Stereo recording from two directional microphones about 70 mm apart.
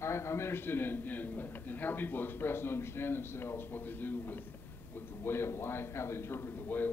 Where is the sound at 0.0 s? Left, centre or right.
Left.